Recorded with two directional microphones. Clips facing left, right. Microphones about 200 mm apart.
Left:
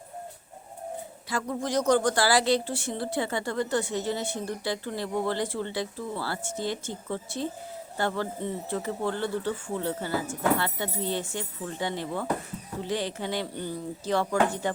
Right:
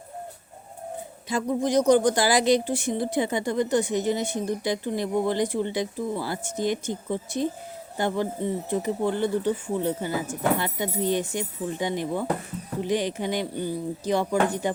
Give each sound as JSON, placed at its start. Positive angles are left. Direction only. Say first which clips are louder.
{"t": 1.3, "sound": "speech", "louder": "right 5 dB", "side_deg": -20}